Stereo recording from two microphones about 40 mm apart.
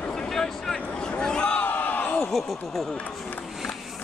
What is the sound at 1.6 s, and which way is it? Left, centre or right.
Crowd, left.